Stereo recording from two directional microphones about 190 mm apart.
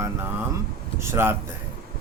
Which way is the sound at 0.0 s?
15° right (ahead or behind).